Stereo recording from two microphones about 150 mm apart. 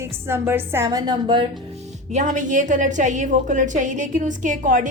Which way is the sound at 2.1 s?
55° right (ahead or behind).